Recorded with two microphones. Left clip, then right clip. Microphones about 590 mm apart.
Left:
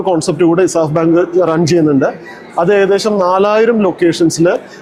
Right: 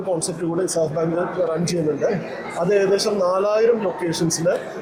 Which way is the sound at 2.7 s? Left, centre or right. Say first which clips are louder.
Left 7 dB; left.